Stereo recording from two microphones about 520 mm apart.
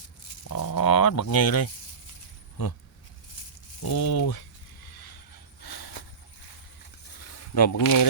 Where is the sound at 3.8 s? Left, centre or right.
Left.